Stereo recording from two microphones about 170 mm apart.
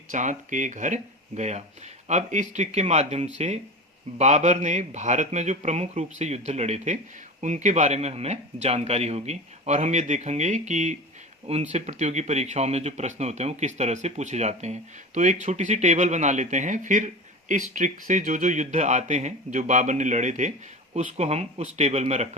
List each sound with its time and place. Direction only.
0.1 s speech: 45° right (ahead or behind)